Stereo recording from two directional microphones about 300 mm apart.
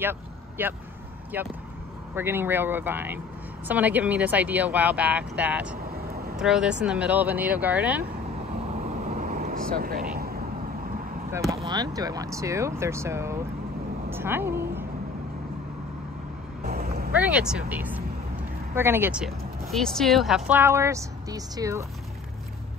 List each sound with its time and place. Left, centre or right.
0.0 s speech: centre
9.0 s vehicle: right
9.8 s speech: right
11.3 s speech: centre
16.6 s vehicle: right
17.1 s speech: centre